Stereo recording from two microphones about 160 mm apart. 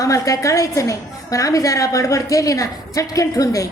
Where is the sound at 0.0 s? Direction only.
20° left (ahead or behind).